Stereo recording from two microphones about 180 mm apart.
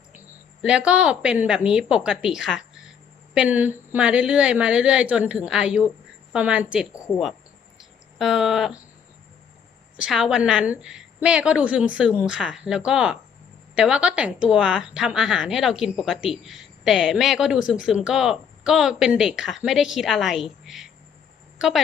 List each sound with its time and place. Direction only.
0.6 s a woman's voice: 5° right (ahead or behind)
8.2 s speech: centre (ahead or behind)
10.0 s speech: 5° right (ahead or behind)